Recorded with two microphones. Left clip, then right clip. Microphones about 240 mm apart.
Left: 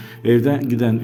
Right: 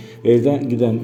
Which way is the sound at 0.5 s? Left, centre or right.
Left.